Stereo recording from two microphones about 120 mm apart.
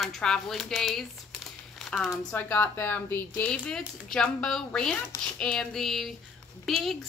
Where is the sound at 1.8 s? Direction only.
Centre (ahead or behind).